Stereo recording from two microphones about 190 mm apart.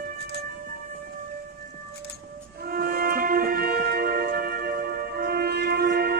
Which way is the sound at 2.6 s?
50° right (ahead or behind).